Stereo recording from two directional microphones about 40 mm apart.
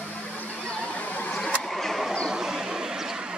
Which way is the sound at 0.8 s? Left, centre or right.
Left.